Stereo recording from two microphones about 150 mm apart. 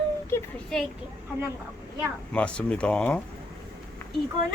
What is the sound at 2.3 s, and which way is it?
Speech, 5° left (ahead or behind).